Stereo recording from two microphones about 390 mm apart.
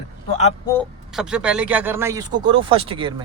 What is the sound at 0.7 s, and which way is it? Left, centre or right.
A man's voice, centre.